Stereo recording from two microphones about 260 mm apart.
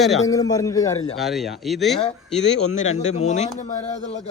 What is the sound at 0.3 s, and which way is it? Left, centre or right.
Speech, centre.